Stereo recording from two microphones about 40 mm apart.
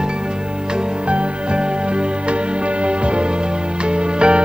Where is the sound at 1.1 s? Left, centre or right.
Right.